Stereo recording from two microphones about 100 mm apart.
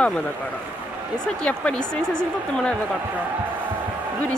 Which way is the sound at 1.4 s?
10° left (ahead or behind).